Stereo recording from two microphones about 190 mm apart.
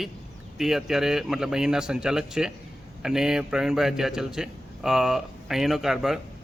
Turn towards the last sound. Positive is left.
turn(degrees=0)  # may be behind; listen again after turning